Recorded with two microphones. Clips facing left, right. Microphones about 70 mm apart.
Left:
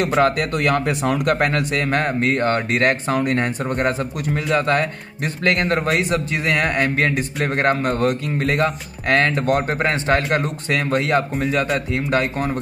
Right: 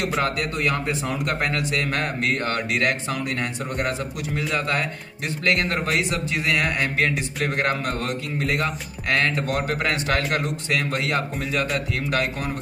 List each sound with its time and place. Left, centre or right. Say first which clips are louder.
0.2 s speech: left 6 dB; left